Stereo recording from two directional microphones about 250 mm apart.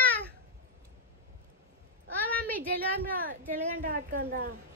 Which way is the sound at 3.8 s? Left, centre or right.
Right.